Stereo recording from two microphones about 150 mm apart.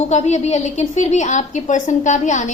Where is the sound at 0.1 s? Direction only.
50° left (ahead or behind).